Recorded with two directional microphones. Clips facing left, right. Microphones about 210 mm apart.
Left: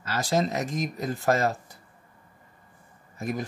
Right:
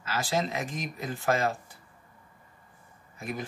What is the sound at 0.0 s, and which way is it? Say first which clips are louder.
Speech: left 4 dB; 40° left (ahead or behind).